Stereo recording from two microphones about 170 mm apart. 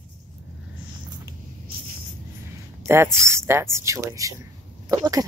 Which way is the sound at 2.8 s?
15° right (ahead or behind).